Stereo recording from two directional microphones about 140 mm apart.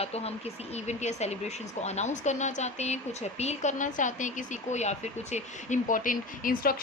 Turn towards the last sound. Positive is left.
turn(degrees=85)